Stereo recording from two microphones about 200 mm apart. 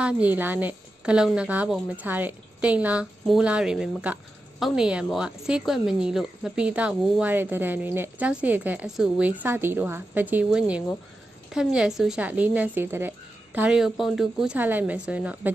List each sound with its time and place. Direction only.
0.0 s a woman's voice: 10° right (ahead or behind)